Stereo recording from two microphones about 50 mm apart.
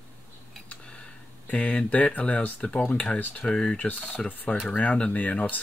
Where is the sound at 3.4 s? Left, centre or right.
Centre.